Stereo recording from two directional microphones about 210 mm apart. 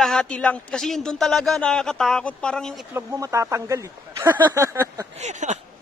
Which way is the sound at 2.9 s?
15° right (ahead or behind).